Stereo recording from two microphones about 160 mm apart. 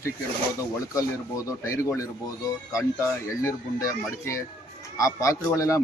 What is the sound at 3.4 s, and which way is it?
Speech, 20° left (ahead or behind).